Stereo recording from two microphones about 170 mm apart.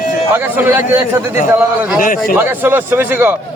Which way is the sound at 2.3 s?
10° right (ahead or behind).